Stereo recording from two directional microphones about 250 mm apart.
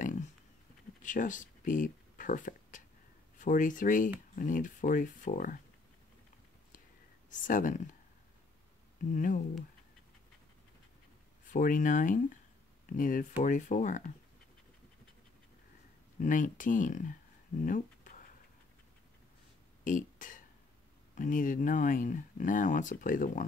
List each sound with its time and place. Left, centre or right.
1.0 s speech: left
7.3 s speech: left
9.1 s speech: left
11.4 s speech: left
16.2 s speech: left
19.8 s speech: left